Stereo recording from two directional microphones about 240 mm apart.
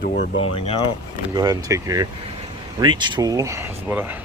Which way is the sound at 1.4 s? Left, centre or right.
Centre.